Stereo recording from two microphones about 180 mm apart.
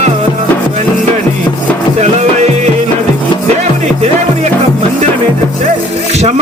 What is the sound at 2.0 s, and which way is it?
Music, 40° right (ahead or behind).